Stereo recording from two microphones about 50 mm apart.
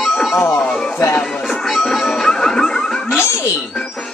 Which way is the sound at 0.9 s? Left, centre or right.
Left.